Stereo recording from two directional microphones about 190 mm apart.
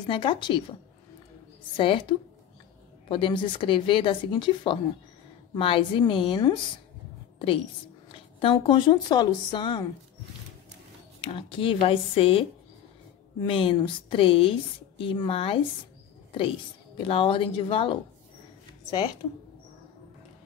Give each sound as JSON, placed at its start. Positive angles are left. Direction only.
{"t": 0.0, "sound": "a woman's voice", "side_deg": 25}
{"t": 1.8, "sound": "a woman's voice", "side_deg": 25}
{"t": 11.1, "sound": "a woman's voice", "side_deg": 25}